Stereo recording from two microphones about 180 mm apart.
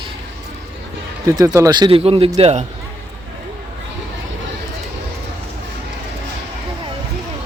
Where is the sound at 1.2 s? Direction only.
20° right (ahead or behind); by 2.6 s 35° right (ahead or behind).